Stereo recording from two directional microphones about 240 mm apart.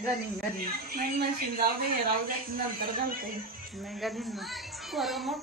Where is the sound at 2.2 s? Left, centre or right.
Right.